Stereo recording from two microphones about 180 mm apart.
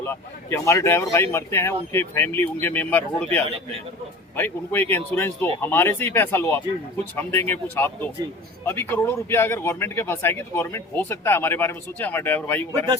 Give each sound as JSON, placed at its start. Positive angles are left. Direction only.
{"t": 0.0, "sound": "speech", "side_deg": 15}
{"t": 4.4, "sound": "speech", "side_deg": 10}